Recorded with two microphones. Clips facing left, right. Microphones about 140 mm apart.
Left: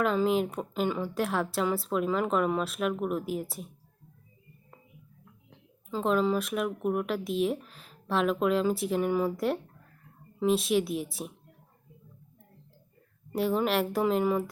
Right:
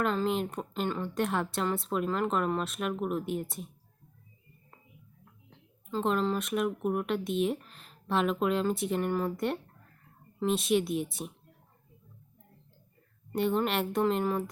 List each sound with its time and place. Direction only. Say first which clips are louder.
0.0 s speech: left 3 dB; 5° left (ahead or behind)
5.5 s speech: left 1 dB; 5° left (ahead or behind)
13.3 s speech: left 2 dB; centre (ahead or behind)